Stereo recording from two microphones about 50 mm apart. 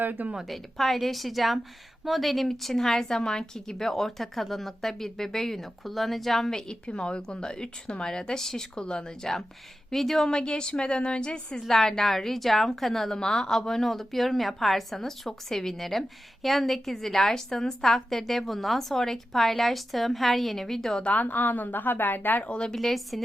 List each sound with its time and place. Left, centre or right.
0.0 s a woman's voice: right
0.4 s a woman's voice: centre
21.0 s a woman's voice: left
22.4 s a woman's voice: left
22.7 s a woman's voice: centre